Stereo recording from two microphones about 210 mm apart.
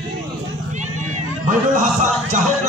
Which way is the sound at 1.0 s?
35° right (ahead or behind).